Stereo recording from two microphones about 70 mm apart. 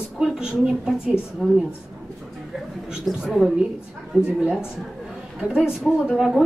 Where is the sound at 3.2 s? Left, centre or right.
Centre.